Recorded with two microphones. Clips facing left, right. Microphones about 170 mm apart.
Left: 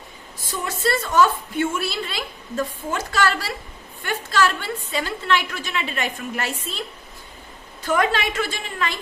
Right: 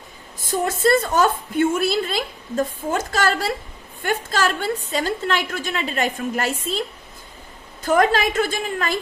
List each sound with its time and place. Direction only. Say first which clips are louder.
0.4 s a woman's voice: right 6 dB; 50° right (ahead or behind)
7.9 s a woman's voice: right 4 dB; 45° right (ahead or behind)